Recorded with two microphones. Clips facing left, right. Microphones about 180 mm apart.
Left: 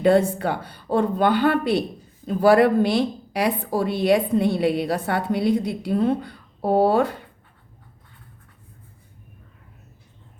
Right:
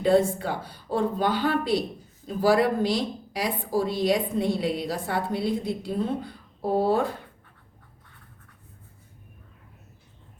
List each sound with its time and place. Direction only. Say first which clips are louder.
0.0 s a woman's voice: left 3 dB; 65° left (ahead or behind)